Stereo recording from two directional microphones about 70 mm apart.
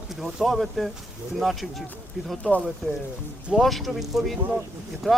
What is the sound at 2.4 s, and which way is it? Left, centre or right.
Speech, left.